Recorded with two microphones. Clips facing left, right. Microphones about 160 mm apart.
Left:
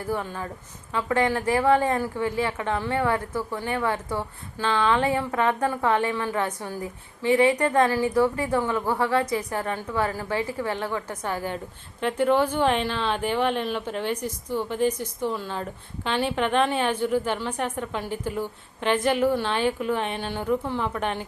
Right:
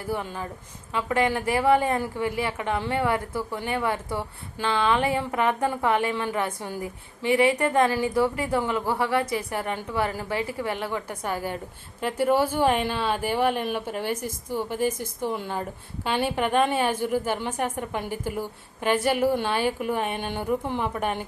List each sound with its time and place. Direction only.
0.1 s a woman's voice: 20° right (ahead or behind)